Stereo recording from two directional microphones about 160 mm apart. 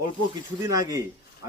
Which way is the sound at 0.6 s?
20° right (ahead or behind).